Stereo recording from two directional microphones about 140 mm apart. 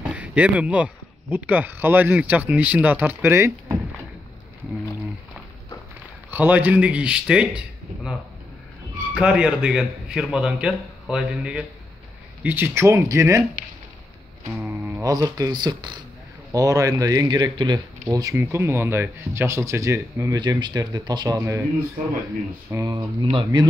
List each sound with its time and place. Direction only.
0.1 s speech: 10° right (ahead or behind)
6.3 s a man's voice: 10° right (ahead or behind)
14.6 s music: 15° right (ahead or behind)
15.0 s speech: 25° right (ahead or behind)
22.7 s speech: 25° right (ahead or behind)